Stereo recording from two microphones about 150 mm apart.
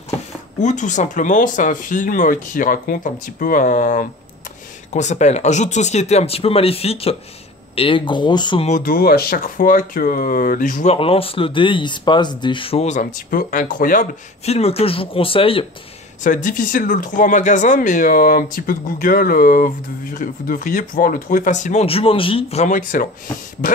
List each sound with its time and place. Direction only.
0.6 s speech: 55° left (ahead or behind)
4.9 s speech: 50° left (ahead or behind); by 8.6 s 30° left (ahead or behind)
8.6 s speech: 65° left (ahead or behind)
11.0 s speech: 40° left (ahead or behind)
12.8 s speech: 55° left (ahead or behind)
14.4 s speech: 45° left (ahead or behind)
16.3 s speech: 60° left (ahead or behind)